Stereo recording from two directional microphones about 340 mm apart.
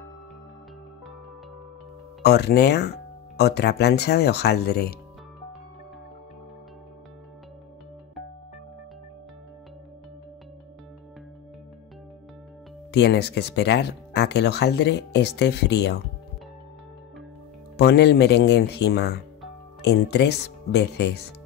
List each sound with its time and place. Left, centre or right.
2.2 s speech: left
12.9 s speech: left
17.7 s speech: left